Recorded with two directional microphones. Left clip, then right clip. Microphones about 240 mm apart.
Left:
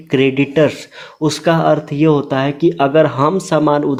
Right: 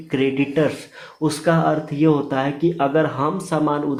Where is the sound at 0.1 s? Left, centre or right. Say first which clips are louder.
Left 6 dB; left.